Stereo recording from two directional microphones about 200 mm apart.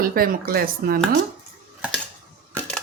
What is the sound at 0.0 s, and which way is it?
Speech, 45° right (ahead or behind).